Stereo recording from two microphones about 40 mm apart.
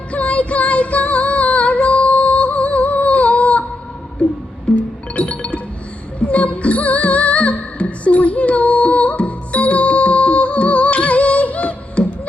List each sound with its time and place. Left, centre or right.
0.1 s music: left
4.7 s music: left